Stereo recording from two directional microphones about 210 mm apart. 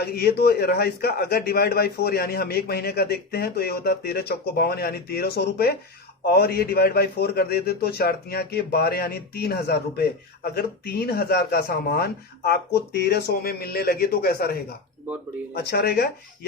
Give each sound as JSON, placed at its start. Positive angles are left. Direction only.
{"t": 0.0, "sound": "a man's voice", "side_deg": 50}